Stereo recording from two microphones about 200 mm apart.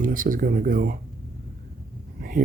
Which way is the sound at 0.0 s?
45° right (ahead or behind).